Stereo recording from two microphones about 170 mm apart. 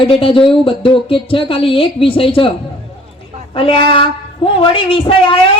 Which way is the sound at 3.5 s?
30° left (ahead or behind).